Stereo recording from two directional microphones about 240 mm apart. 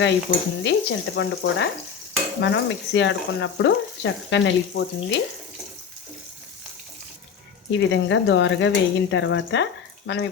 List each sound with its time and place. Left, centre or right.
0.0 s speech: left
7.7 s speech: left